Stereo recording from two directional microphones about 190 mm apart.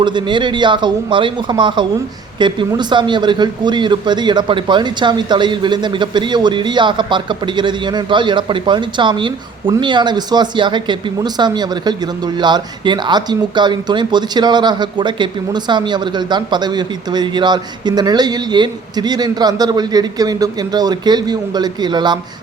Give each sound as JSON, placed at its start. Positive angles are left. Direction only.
{"t": 0.0, "sound": "speech", "side_deg": -25}